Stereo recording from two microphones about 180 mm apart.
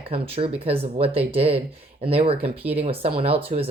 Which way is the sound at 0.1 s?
30° right (ahead or behind).